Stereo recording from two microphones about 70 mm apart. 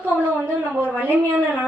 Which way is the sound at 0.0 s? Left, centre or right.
Right.